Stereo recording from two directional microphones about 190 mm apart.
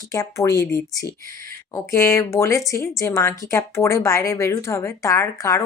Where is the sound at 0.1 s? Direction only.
15° left (ahead or behind).